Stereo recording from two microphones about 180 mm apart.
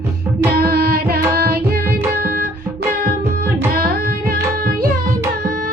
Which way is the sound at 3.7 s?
55° right (ahead or behind).